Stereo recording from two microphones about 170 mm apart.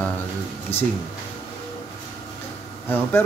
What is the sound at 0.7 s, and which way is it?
Speech, 35° left (ahead or behind).